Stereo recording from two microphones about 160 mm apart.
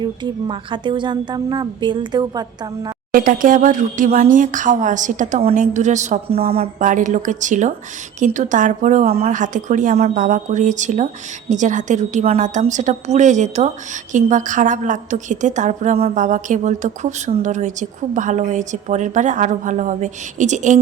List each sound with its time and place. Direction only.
0.0 s a woman's voice: 30° right (ahead or behind)
3.1 s speech: 60° right (ahead or behind); by 6.7 s 40° right (ahead or behind)
6.7 s speech: 55° right (ahead or behind)